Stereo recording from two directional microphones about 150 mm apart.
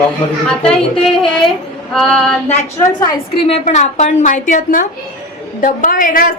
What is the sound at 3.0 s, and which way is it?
Speech, 25° left (ahead or behind).